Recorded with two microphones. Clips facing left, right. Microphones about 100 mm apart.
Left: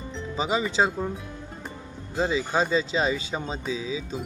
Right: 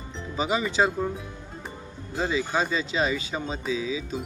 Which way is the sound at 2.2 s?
25° left (ahead or behind).